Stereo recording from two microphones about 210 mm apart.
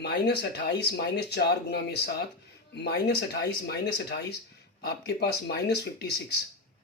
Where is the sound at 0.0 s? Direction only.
50° left (ahead or behind).